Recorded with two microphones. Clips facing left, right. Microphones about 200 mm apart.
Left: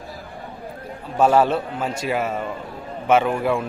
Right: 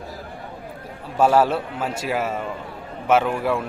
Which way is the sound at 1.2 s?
5° right (ahead or behind).